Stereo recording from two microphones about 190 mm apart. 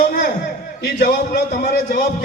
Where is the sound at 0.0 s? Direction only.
50° left (ahead or behind).